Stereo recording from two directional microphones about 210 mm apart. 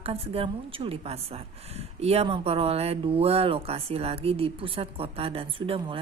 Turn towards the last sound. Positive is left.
turn(degrees=-25)  # may be behind; listen again after turning